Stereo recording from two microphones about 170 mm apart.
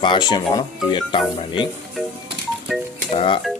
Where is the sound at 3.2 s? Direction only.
30° left (ahead or behind).